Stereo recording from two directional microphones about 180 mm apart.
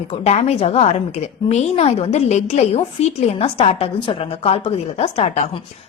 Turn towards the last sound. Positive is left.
turn(degrees=35)  # may be behind; listen again after turning